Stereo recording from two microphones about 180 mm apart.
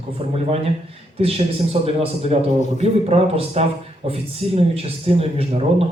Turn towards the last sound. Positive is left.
turn(degrees=-35)  # may be behind; listen again after turning